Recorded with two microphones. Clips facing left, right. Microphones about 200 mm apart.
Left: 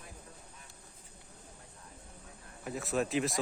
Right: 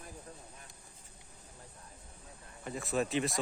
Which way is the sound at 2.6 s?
5° left (ahead or behind).